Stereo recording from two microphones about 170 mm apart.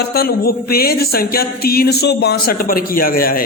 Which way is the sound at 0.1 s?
65° left (ahead or behind).